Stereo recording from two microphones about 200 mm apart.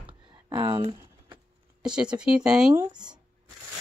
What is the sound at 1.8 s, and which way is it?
Speech, 5° right (ahead or behind).